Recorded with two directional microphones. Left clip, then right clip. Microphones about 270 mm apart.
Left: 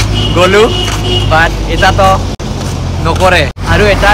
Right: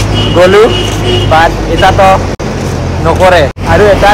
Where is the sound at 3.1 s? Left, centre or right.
Centre.